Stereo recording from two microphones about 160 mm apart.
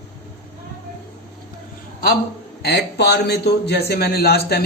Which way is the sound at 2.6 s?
90° left.